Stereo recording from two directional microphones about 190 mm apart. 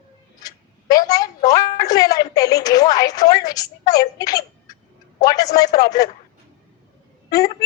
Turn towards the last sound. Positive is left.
turn(degrees=20)  # may be behind; listen again after turning